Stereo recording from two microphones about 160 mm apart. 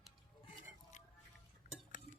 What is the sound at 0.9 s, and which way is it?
Music, 50° left (ahead or behind).